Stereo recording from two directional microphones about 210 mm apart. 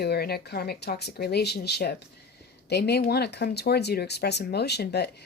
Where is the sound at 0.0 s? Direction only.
50° left (ahead or behind).